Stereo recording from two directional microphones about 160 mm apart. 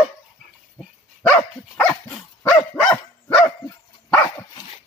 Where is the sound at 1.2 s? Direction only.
10° left (ahead or behind).